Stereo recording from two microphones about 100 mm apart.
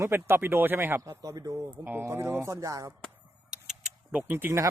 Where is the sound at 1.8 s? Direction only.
20° right (ahead or behind).